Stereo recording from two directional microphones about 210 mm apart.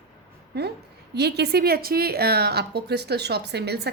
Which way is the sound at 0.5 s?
50° right (ahead or behind).